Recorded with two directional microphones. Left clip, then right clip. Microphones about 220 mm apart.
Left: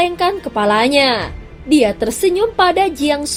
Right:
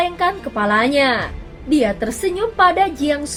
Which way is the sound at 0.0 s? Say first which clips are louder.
Left 3 dB; 35° left (ahead or behind).